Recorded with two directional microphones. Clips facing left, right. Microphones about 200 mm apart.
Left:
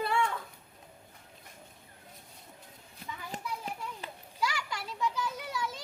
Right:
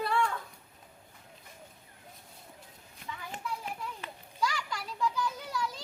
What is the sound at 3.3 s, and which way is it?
Children playing, 35° left (ahead or behind).